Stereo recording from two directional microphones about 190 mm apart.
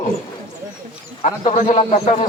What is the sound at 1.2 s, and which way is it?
Speech, 35° left (ahead or behind).